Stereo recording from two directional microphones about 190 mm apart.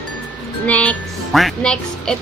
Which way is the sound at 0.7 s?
5° left (ahead or behind).